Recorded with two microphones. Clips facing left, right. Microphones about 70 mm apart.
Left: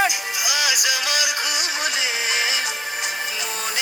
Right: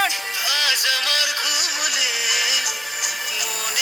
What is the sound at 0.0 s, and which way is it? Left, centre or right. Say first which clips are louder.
Music: left 1 dB; centre.